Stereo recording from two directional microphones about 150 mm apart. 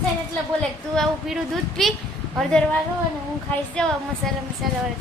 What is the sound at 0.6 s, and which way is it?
A woman's voice, centre (ahead or behind).